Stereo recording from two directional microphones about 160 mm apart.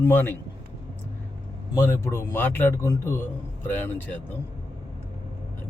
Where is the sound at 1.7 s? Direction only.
20° left (ahead or behind).